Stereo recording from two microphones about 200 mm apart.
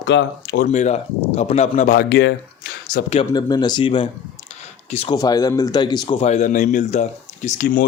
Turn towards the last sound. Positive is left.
turn(degrees=45)  # may be behind; listen again after turning